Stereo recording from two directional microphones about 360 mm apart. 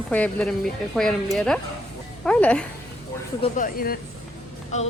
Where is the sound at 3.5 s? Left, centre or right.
Left.